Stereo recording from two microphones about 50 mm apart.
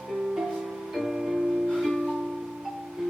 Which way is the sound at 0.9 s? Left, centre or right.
Centre.